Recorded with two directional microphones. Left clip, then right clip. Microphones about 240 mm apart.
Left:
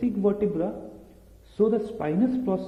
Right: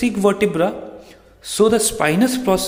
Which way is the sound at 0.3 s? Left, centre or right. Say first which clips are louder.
Right 9 dB; right.